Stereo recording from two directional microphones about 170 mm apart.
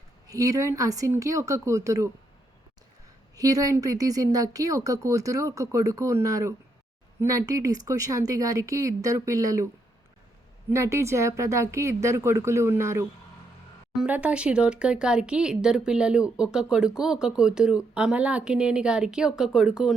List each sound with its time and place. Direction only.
0.3 s speech: 20° right (ahead or behind)
3.3 s speech: 20° right (ahead or behind)
10.7 s speech: 15° right (ahead or behind)